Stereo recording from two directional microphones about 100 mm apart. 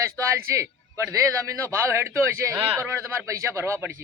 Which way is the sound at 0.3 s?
30° right (ahead or behind).